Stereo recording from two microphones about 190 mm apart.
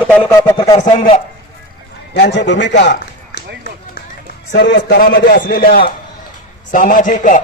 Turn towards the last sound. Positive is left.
turn(degrees=40)  # may be behind; listen again after turning